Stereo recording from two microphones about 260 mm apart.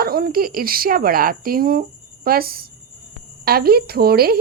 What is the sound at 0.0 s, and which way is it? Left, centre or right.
Speech, right.